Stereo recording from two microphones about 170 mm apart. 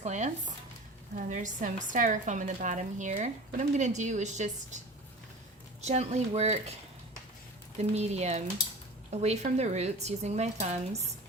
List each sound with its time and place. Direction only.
0.0 s a woman's voice: 45° right (ahead or behind)
5.8 s speech: 40° right (ahead or behind)
7.8 s speech: 40° right (ahead or behind)